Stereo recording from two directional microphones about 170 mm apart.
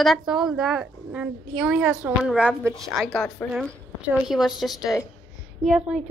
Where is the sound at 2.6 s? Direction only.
15° right (ahead or behind).